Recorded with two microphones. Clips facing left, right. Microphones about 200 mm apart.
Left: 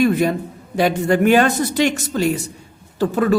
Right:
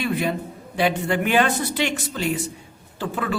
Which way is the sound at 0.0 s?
45° left (ahead or behind).